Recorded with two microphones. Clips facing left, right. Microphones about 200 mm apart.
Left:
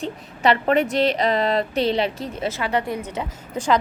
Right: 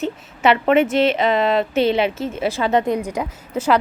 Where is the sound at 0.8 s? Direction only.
Centre (ahead or behind).